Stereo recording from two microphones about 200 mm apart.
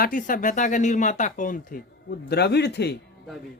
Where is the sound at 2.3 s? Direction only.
55° left (ahead or behind).